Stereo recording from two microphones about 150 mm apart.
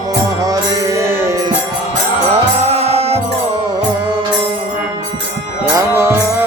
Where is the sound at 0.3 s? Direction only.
25° right (ahead or behind).